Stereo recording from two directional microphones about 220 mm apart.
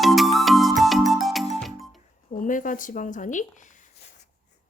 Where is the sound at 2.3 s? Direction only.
35° left (ahead or behind).